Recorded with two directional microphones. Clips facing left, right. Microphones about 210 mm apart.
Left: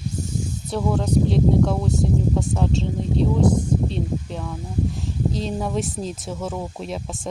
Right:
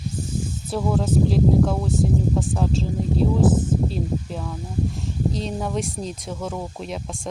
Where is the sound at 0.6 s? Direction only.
Centre (ahead or behind).